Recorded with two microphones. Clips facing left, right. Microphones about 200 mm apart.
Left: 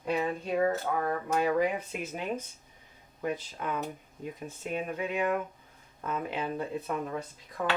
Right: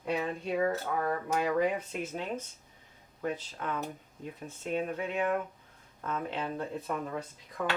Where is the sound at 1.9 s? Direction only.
10° left (ahead or behind).